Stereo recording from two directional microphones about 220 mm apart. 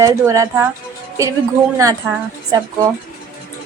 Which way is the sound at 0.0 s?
15° right (ahead or behind).